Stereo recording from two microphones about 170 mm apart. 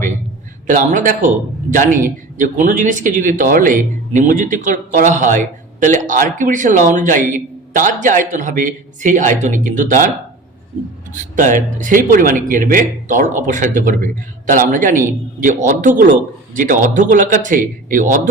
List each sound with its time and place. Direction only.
0.7 s speech: 50° right (ahead or behind)
11.1 s speech: 50° right (ahead or behind)